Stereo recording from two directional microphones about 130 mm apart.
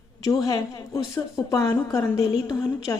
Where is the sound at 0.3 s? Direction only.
25° left (ahead or behind).